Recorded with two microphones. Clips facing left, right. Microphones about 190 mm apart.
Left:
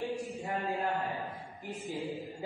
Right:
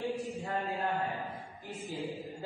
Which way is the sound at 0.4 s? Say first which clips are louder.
Left 1 dB; 15° left (ahead or behind).